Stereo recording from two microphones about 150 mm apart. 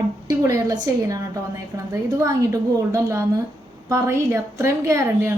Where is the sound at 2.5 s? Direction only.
20° right (ahead or behind).